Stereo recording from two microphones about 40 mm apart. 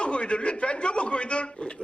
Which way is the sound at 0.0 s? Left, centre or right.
Left.